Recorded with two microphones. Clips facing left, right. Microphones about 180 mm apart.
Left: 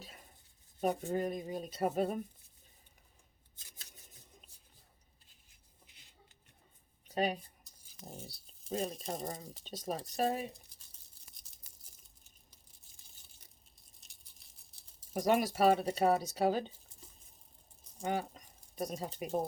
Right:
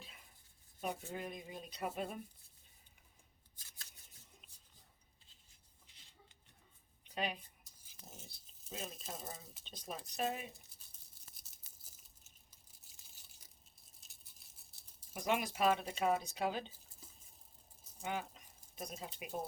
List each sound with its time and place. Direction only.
0.0 s writing: 45° left (ahead or behind)
0.8 s speech: 40° left (ahead or behind)
3.5 s scissors: 20° left (ahead or behind)
7.1 s speech: 40° left (ahead or behind)
8.0 s a sound: 35° left (ahead or behind)
9.1 s speech: 40° left (ahead or behind)
11.3 s a sound: 5° right (ahead or behind)
14.0 s a sound: 5° right (ahead or behind)
15.1 s speech: 40° left (ahead or behind)
18.0 s speech: 40° left (ahead or behind)